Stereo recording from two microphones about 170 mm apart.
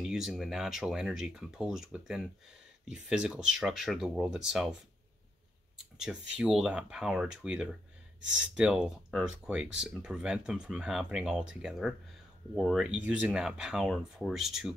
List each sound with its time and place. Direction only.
0.0 s speech: centre (ahead or behind)
6.3 s speech: 5° right (ahead or behind)